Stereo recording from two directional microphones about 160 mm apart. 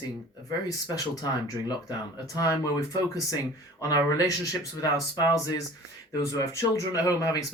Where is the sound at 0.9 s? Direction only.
25° left (ahead or behind).